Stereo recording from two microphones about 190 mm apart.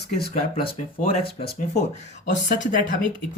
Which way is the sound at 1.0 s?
55° left (ahead or behind).